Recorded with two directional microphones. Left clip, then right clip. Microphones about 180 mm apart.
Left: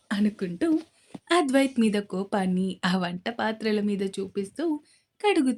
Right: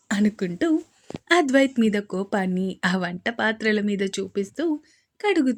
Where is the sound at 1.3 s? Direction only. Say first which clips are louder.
Right 4 dB; 15° right (ahead or behind).